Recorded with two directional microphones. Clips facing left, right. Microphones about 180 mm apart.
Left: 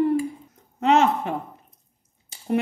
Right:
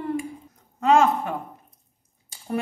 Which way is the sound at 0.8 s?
25° left (ahead or behind).